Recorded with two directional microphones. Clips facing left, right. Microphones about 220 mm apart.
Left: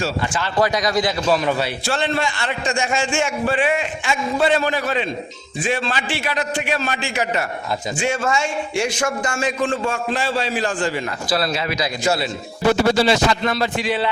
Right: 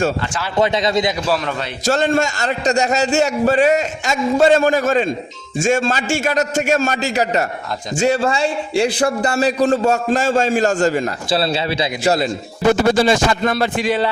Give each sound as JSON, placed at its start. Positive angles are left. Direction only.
{"t": 0.5, "sound": "a man's voice", "side_deg": -25}
{"t": 1.8, "sound": "a man's voice", "side_deg": -45}
{"t": 11.3, "sound": "a man's voice", "side_deg": -30}
{"t": 12.9, "sound": "a man's voice", "side_deg": -50}